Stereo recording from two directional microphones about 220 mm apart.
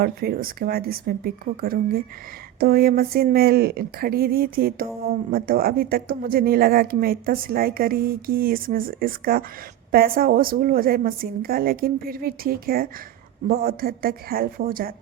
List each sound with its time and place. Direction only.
0.0 s speech: 45° right (ahead or behind)